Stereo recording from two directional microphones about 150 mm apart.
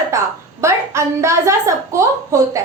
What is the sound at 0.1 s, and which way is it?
A woman's voice, 20° right (ahead or behind).